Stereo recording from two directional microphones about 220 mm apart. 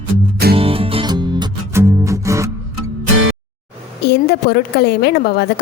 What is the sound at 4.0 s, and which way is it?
A woman's voice, 50° left (ahead or behind).